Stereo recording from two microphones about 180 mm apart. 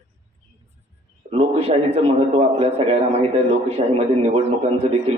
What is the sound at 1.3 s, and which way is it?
A man's voice, 35° right (ahead or behind).